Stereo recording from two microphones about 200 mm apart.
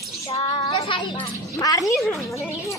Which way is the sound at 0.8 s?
25° left (ahead or behind).